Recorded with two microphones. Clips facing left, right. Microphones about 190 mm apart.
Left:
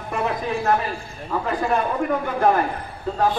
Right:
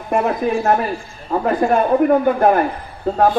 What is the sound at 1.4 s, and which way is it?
Speech, 50° right (ahead or behind).